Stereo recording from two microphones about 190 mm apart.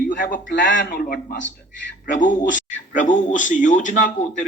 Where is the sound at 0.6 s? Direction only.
50° left (ahead or behind).